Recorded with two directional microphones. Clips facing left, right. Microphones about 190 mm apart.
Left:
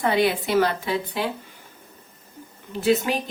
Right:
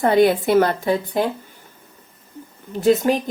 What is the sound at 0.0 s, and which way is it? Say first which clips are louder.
A woman's voice: right 6 dB; 45° right (ahead or behind).